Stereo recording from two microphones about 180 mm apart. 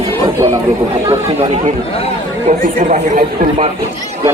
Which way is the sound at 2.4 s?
40° right (ahead or behind).